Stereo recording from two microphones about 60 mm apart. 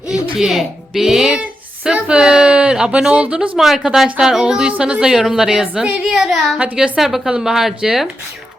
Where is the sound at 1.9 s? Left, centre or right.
Centre.